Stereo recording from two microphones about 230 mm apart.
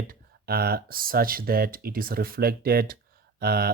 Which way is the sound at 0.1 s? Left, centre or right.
Right.